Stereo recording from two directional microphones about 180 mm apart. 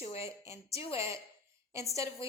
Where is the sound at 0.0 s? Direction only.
35° left (ahead or behind).